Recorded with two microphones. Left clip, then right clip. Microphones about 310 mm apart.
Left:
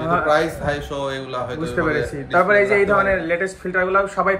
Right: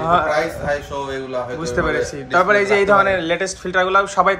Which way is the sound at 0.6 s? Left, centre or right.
Centre.